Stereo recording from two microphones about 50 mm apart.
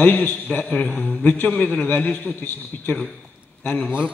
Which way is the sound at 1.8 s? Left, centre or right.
Left.